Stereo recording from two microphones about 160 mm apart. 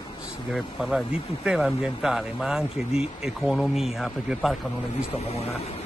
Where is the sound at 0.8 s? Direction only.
5° right (ahead or behind).